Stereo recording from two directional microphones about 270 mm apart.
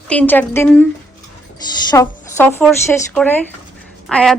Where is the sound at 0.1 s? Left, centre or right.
Centre.